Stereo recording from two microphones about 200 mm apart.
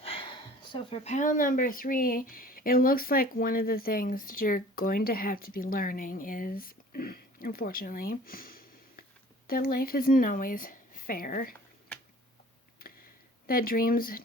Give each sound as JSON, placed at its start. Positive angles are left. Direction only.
{"t": 0.0, "sound": "speech", "side_deg": 25}
{"t": 13.5, "sound": "speech", "side_deg": 45}